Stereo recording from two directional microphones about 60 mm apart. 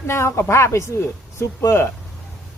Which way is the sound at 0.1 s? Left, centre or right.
Left.